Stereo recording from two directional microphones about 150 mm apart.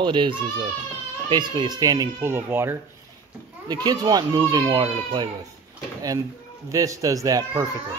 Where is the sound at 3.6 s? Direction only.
25° right (ahead or behind).